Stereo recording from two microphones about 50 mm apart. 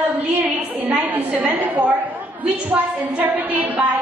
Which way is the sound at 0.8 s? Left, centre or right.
Right.